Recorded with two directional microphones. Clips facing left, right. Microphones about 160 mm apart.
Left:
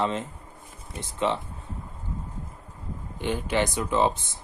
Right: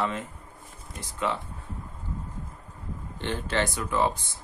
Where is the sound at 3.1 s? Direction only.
10° left (ahead or behind).